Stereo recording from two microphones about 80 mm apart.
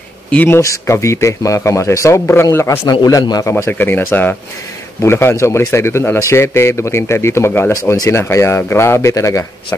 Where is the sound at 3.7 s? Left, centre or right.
Left.